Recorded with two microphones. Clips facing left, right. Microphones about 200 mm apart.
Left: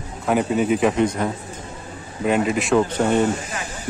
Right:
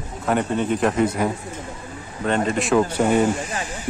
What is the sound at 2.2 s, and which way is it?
Speech, 5° left (ahead or behind).